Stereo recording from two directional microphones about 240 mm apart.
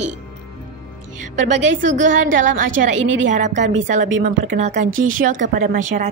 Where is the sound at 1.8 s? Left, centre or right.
Right.